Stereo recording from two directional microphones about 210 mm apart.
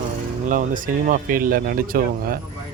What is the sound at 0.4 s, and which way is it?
Speech, 40° right (ahead or behind).